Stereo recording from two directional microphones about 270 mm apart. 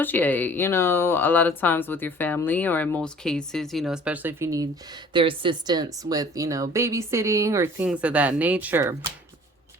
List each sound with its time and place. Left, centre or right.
0.0 s speech: centre